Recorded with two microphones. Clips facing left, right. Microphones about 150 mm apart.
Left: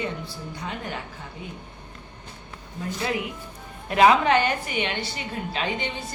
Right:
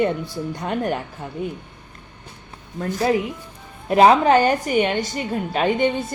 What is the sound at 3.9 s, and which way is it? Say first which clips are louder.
A woman's voice: right 4 dB; 40° right (ahead or behind).